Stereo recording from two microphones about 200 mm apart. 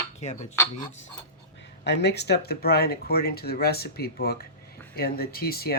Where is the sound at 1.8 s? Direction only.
55° left (ahead or behind).